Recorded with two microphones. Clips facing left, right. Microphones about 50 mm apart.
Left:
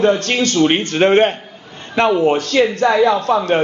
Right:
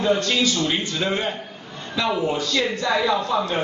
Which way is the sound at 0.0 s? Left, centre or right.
Left.